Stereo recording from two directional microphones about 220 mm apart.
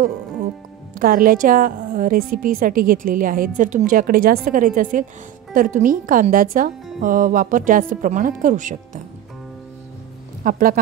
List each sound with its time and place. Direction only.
0.9 s speech: 40° right (ahead or behind)
10.4 s speech: 40° right (ahead or behind)